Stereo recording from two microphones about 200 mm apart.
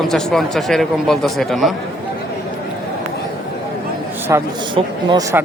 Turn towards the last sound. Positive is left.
turn(degrees=-20)  # may be behind; listen again after turning